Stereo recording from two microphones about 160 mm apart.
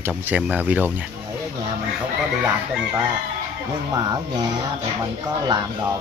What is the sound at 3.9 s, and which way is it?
Speech, 25° right (ahead or behind).